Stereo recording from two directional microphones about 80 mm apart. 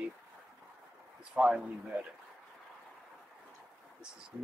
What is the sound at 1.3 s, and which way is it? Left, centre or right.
Speech, centre.